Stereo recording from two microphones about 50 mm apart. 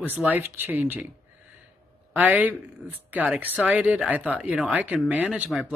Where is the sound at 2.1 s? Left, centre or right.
Right.